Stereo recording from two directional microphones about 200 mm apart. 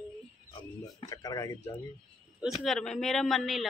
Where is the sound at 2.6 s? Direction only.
5° left (ahead or behind).